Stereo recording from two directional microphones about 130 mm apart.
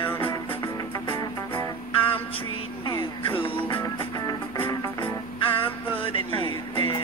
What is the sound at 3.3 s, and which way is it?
Music, 45° left (ahead or behind).